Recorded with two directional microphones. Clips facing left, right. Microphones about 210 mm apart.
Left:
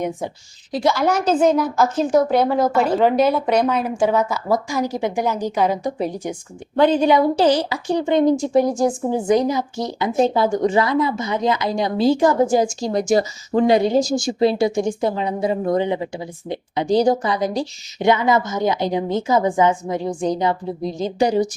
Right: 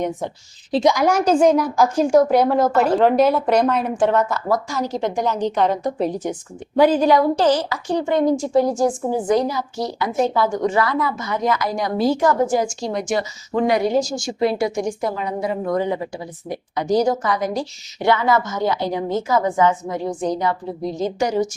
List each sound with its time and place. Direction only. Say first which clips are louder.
0.7 s a woman's voice: right 2 dB; 20° right (ahead or behind); by 6.3 s 10° left (ahead or behind)
6.7 s speech: even; 5° right (ahead or behind)
7.4 s a woman's voice: left 1 dB; 15° left (ahead or behind)
12.8 s a woman's voice: left 4 dB; 40° left (ahead or behind)
18.0 s a woman's voice: left 1 dB; 20° left (ahead or behind)
21.2 s a woman's voice: left 4 dB; 30° left (ahead or behind)